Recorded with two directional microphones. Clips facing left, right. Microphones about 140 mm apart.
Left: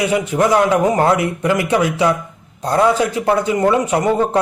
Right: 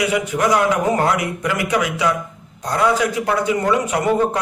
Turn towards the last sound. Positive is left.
turn(degrees=30)  # may be behind; listen again after turning